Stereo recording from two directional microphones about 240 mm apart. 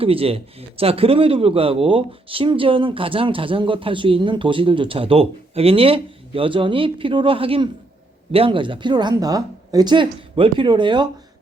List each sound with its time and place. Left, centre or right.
0.0 s speech: right